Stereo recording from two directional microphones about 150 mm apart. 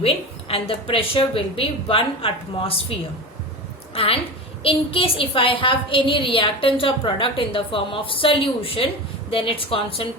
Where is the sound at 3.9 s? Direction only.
40° left (ahead or behind).